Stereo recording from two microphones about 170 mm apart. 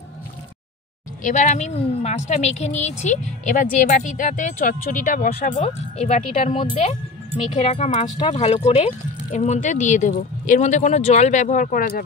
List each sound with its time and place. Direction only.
1.2 s speech: 45° left (ahead or behind)
7.6 s speech: 40° left (ahead or behind); by 12.0 s 55° left (ahead or behind)